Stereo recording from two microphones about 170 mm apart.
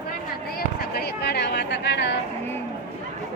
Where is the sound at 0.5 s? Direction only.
65° left (ahead or behind); by 2.2 s 90° left.